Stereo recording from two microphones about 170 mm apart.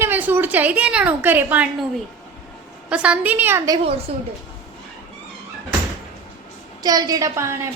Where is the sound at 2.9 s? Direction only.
5° right (ahead or behind).